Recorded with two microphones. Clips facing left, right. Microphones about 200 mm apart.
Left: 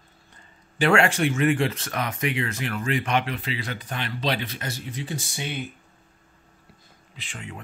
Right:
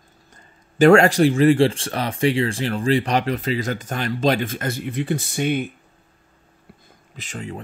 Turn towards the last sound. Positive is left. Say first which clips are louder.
# right 7 dB
turn(degrees=-40)  # may be behind; listen again after turning